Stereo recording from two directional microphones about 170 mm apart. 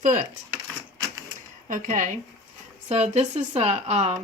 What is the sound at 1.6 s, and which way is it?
A woman's voice, 50° right (ahead or behind).